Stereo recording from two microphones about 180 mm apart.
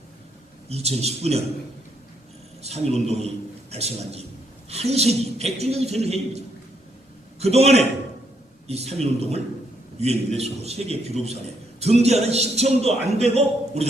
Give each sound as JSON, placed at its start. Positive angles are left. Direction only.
{"t": 0.7, "sound": "a man's voice", "side_deg": -35}
{"t": 2.6, "sound": "a man's voice", "side_deg": -35}